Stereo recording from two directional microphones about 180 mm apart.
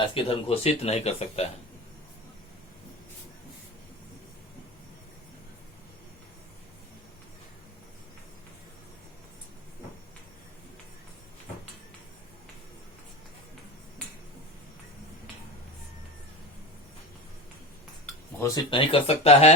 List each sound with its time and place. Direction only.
0.0 s speech: 30° left (ahead or behind)
18.3 s a sound: 15° left (ahead or behind)
18.7 s speech: 30° left (ahead or behind)